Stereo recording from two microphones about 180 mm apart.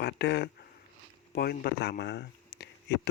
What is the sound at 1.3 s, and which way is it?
Speech, 60° left (ahead or behind).